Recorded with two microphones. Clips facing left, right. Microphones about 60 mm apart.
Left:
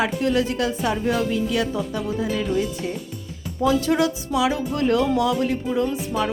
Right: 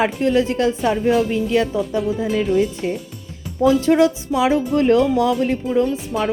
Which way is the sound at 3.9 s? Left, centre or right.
Right.